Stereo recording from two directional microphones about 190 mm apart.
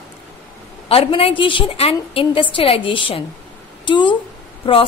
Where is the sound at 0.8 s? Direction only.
30° left (ahead or behind).